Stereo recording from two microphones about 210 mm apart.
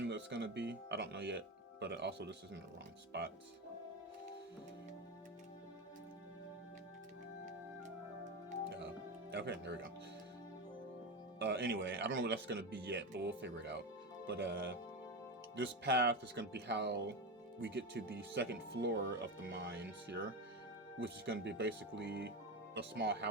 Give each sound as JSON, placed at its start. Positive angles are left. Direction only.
{"t": 0.0, "sound": "speech", "side_deg": -55}
{"t": 9.3, "sound": "speech", "side_deg": -55}
{"t": 11.3, "sound": "speech", "side_deg": -50}
{"t": 21.2, "sound": "speech", "side_deg": -55}